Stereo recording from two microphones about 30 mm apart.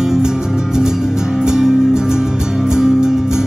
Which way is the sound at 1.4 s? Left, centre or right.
Right.